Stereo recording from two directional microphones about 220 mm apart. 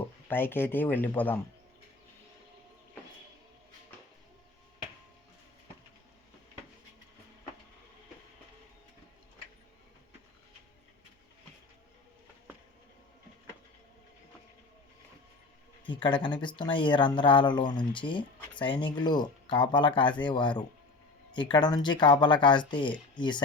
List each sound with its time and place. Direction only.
0.0 s speech: 10° left (ahead or behind)
15.8 s speech: 20° left (ahead or behind)